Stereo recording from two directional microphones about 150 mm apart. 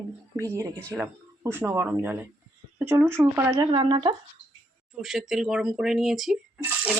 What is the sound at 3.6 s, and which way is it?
Speech, 35° right (ahead or behind).